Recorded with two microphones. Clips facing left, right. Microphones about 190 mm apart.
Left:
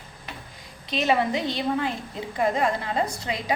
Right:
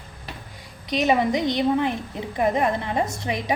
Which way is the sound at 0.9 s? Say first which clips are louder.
Right 3 dB; 15° right (ahead or behind).